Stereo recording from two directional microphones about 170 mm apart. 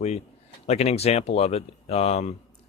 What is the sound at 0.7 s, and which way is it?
Speech, 40° left (ahead or behind).